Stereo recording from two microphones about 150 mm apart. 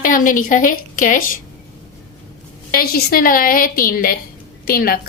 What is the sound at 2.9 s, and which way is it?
A woman's voice, 75° left (ahead or behind).